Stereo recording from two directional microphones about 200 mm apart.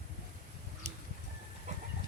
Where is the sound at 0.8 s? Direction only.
35° right (ahead or behind).